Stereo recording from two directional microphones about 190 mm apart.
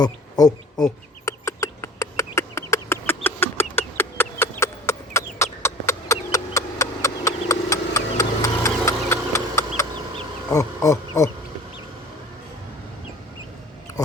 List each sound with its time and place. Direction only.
0.0 s speech: 20° left (ahead or behind)
1.2 s a sound: 15° left (ahead or behind)
10.5 s speech: 15° left (ahead or behind)